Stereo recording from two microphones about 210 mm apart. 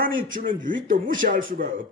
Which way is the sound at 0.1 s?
70° right (ahead or behind).